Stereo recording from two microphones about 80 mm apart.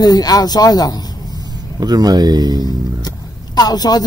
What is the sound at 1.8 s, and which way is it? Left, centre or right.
Speech, right.